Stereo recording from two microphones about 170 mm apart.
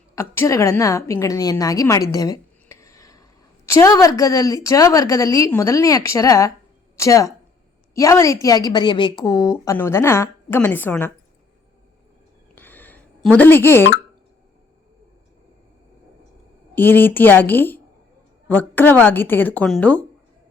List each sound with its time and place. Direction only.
0.2 s a woman's voice: 15° left (ahead or behind)
12.5 s a sound: 10° left (ahead or behind)
16.7 s a woman's voice: 10° left (ahead or behind)